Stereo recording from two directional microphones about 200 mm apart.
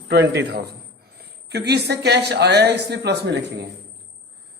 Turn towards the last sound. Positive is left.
turn(degrees=-55)  # may be behind; listen again after turning